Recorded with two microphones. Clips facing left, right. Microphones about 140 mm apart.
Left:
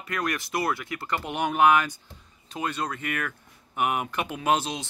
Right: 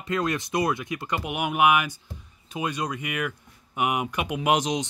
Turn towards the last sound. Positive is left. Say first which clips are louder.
# right 2 dB
turn(degrees=-15)  # may be behind; listen again after turning